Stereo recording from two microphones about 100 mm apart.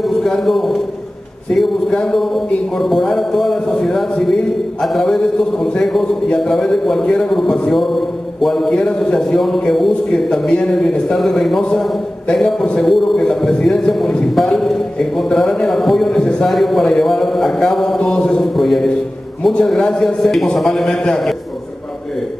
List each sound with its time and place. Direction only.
0.0 s a man's voice: centre (ahead or behind)